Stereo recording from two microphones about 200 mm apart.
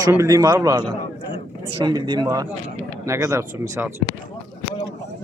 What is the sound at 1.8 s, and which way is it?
Speech, 20° right (ahead or behind).